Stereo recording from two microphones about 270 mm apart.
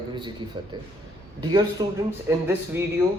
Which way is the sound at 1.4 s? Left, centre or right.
Centre.